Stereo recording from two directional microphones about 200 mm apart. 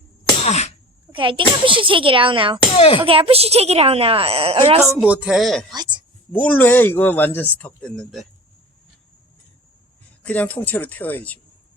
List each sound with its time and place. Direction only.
0.4 s speech: 35° left (ahead or behind)
1.1 s a woman's voice: 25° right (ahead or behind)
2.7 s speech: 30° left (ahead or behind)
3.0 s a woman's voice: 30° right (ahead or behind)
4.8 s speech: centre (ahead or behind)
5.7 s a sound: 20° right (ahead or behind)
6.3 s speech: 10° left (ahead or behind)
10.2 s speech: 10° left (ahead or behind)